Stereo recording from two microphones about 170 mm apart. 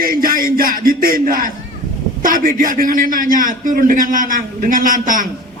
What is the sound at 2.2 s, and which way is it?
A man's voice, 55° right (ahead or behind).